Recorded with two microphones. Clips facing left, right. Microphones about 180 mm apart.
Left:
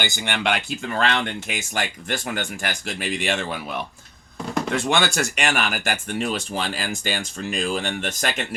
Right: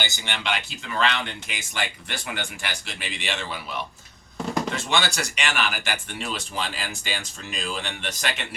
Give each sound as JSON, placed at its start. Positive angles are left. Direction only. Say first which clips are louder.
{"t": 0.0, "sound": "speech", "louder": "left 6 dB", "side_deg": 55}